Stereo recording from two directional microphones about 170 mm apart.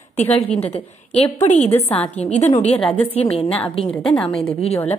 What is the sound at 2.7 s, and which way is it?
Speech, 10° left (ahead or behind).